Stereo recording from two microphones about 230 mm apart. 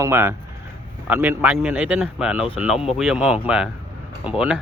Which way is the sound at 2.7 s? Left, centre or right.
Left.